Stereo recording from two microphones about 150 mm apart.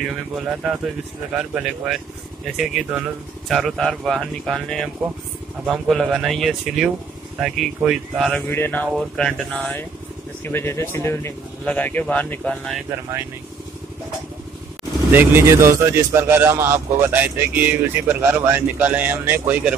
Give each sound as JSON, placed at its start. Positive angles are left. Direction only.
{"t": 1.3, "sound": "speech", "side_deg": -5}
{"t": 8.3, "sound": "speech", "side_deg": 10}
{"t": 15.0, "sound": "a man's voice", "side_deg": -15}